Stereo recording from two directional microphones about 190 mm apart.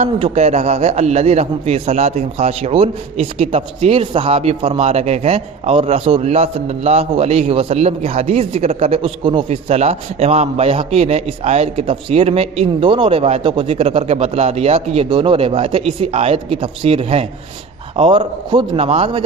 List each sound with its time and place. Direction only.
0.0 s a man's voice: 35° right (ahead or behind)